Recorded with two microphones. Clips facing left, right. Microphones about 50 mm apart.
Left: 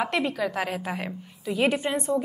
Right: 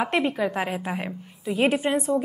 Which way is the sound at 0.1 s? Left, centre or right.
Right.